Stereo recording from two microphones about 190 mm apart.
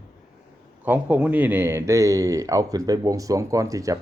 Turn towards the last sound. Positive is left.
turn(degrees=-15)  # may be behind; listen again after turning